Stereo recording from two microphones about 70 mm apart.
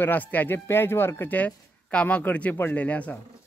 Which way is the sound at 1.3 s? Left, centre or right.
Centre.